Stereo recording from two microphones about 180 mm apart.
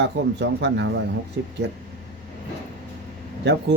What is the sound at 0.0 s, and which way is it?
Speech, 75° right (ahead or behind).